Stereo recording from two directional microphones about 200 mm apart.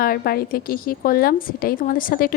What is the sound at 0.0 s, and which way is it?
A woman's voice, 50° left (ahead or behind).